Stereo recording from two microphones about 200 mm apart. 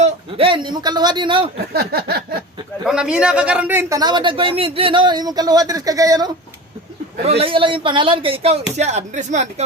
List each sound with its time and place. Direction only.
0.0 s a man's voice: 25° right (ahead or behind)
1.7 s a sound: 50° right (ahead or behind)
2.8 s a man's voice: 5° right (ahead or behind)
7.2 s a man's voice: 30° right (ahead or behind)